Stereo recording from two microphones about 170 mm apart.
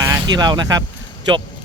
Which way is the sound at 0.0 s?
20° right (ahead or behind).